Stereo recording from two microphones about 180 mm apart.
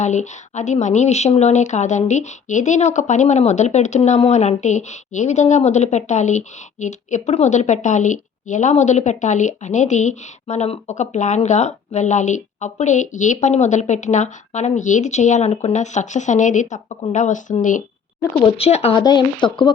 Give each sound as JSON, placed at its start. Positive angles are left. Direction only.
{"t": 0.0, "sound": "a woman's voice", "side_deg": 40}
{"t": 18.4, "sound": "a woman's voice", "side_deg": 35}